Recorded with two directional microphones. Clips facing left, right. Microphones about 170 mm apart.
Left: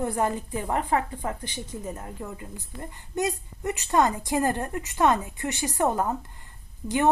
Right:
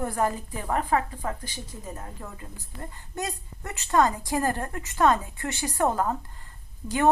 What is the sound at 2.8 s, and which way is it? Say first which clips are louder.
A woman's voice: left 5 dB; 20° left (ahead or behind).